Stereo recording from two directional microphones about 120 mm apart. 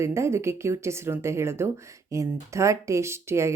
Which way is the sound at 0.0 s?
25° right (ahead or behind).